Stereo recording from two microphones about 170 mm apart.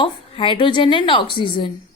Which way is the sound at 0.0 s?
30° left (ahead or behind).